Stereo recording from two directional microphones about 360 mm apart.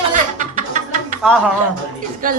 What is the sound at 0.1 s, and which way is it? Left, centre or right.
Music, right.